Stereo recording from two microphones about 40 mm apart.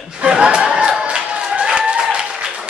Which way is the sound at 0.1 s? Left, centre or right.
Right.